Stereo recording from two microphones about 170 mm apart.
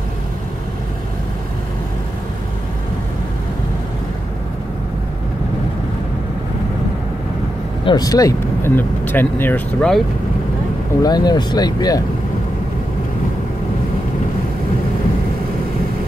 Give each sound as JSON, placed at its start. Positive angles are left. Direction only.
{"t": 7.8, "sound": "speech", "side_deg": 25}
{"t": 11.0, "sound": "speech", "side_deg": 25}